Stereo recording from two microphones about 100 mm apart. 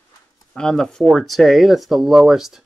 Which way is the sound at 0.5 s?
5° left (ahead or behind).